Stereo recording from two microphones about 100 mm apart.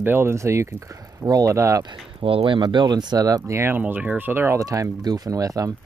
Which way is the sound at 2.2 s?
70° right (ahead or behind).